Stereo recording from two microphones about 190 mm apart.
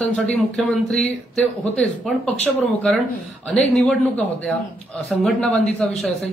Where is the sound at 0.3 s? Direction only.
5° left (ahead or behind).